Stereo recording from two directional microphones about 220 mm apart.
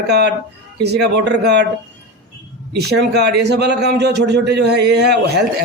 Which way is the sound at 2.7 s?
50° right (ahead or behind).